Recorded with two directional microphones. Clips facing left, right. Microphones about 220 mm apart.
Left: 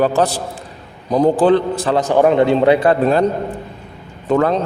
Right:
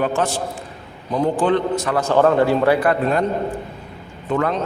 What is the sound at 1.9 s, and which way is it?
A man's voice, 15° left (ahead or behind).